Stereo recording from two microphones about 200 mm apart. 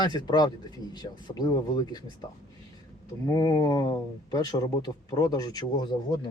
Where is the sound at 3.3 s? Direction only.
15° left (ahead or behind).